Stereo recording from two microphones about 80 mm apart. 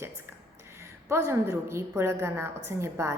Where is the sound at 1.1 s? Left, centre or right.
Right.